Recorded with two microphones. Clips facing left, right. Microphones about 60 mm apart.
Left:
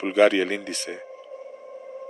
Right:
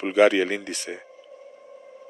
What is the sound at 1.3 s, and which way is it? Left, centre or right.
Whale vocalization, left.